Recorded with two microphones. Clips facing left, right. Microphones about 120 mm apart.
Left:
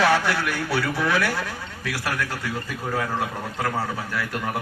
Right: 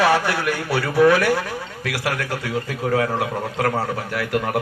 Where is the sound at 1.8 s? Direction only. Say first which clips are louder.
Right 2 dB; 65° right (ahead or behind).